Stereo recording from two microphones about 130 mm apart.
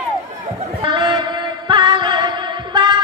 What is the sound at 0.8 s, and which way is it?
Music, 35° right (ahead or behind).